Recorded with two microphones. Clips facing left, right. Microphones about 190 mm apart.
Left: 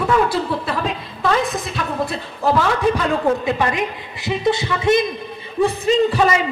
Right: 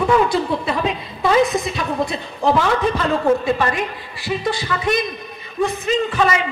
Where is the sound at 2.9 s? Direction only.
15° left (ahead or behind).